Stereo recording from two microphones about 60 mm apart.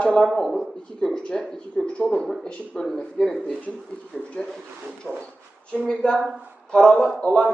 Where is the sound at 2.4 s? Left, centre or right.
Centre.